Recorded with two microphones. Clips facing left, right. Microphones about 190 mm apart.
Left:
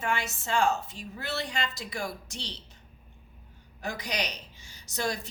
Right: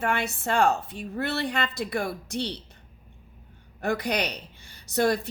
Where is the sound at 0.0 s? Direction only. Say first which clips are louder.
Right 4 dB; 60° right (ahead or behind).